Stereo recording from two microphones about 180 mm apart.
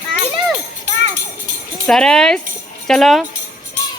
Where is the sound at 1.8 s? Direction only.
5° left (ahead or behind).